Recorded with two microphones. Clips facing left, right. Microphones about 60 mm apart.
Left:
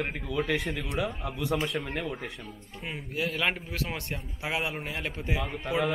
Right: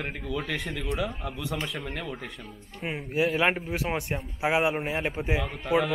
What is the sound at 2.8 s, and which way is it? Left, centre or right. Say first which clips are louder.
A man's voice: right 6 dB; centre.